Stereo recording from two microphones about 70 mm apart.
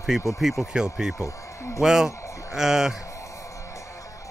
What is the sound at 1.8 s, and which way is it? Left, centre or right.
Speech, centre.